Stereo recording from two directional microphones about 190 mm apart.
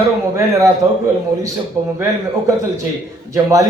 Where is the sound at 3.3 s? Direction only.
15° right (ahead or behind).